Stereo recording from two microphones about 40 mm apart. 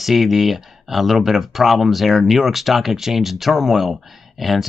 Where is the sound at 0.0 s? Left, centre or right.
Centre.